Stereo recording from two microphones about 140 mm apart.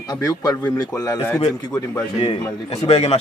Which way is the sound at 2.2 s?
50° left (ahead or behind).